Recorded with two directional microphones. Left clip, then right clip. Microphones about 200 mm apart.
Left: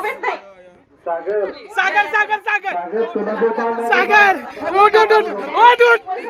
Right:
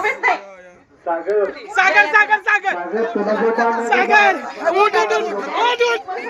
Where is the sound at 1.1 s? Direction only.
50° left (ahead or behind).